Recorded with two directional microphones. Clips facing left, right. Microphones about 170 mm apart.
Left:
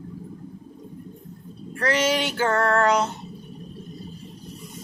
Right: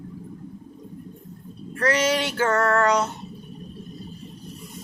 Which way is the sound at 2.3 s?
30° left (ahead or behind).